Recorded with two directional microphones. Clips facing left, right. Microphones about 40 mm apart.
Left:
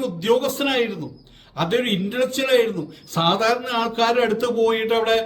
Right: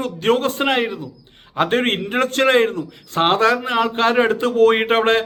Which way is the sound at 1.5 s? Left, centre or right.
Right.